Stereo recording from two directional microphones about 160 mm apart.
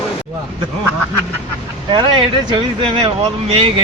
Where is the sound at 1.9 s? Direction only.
30° right (ahead or behind).